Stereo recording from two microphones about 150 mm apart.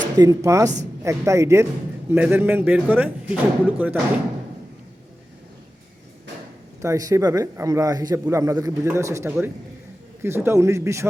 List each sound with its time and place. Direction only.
0.2 s speech: 25° right (ahead or behind)
6.8 s speech: 20° right (ahead or behind)